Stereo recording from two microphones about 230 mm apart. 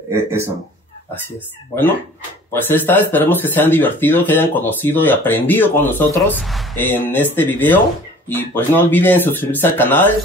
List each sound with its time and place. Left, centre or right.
0.1 s speech: centre
2.5 s speech: centre